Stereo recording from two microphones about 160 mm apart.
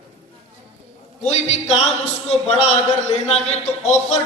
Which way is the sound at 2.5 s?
45° left (ahead or behind).